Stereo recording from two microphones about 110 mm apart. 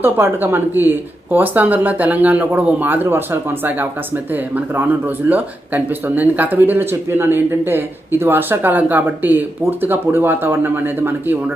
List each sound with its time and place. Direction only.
0.0 s speech: 20° right (ahead or behind)